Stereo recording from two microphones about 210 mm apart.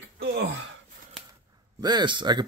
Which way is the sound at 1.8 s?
20° right (ahead or behind).